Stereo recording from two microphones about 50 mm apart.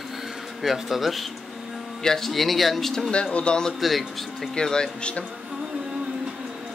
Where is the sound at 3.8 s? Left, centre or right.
Centre.